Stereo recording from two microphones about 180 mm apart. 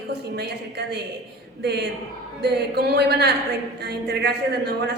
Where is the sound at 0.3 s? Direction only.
65° right (ahead or behind).